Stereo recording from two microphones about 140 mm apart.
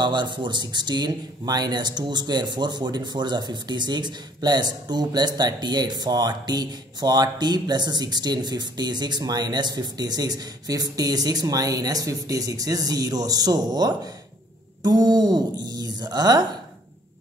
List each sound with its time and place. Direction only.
0.0 s speech: 35° right (ahead or behind)